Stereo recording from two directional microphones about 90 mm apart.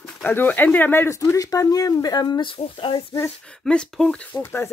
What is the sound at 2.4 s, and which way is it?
Speech, 75° left (ahead or behind).